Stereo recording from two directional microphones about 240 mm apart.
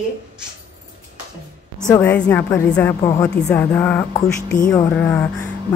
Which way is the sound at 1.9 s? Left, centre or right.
Centre.